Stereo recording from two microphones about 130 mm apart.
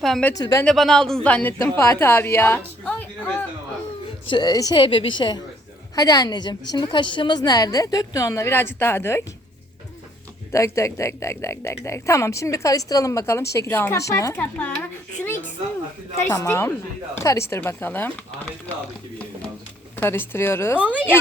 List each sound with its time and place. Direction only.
0.0 s a sound: centre (ahead or behind)
0.3 s speech: 30° left (ahead or behind)
0.6 s a woman's voice: 5° left (ahead or behind)
4.3 s a woman's voice: 30° left (ahead or behind)
4.8 s a woman's voice: 40° left (ahead or behind); by 9.2 s 20° left (ahead or behind)
10.5 s speech: 25° left (ahead or behind)
14.3 s speech: 10° left (ahead or behind)
16.3 s speech: 25° left (ahead or behind)
20.0 s speech: 15° left (ahead or behind)
20.7 s a woman's voice: 10° right (ahead or behind)